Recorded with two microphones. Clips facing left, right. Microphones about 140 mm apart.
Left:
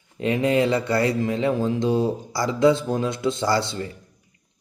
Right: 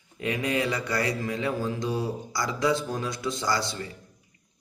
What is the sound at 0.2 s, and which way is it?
Speech, 25° left (ahead or behind).